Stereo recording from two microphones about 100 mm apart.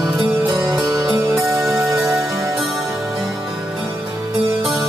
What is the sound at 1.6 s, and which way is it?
Music, centre (ahead or behind).